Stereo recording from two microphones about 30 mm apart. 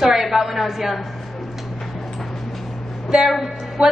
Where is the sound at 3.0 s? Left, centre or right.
Centre.